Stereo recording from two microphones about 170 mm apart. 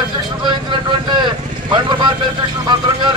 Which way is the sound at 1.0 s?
25° right (ahead or behind).